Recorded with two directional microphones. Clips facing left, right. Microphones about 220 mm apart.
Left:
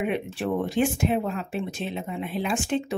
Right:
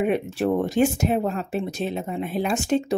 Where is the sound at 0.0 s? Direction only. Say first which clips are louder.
Right 5 dB; 40° right (ahead or behind).